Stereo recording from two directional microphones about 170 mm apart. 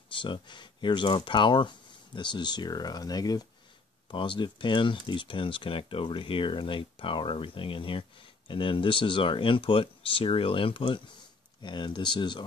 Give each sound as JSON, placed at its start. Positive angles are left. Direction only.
{"t": 0.1, "sound": "speech", "side_deg": 30}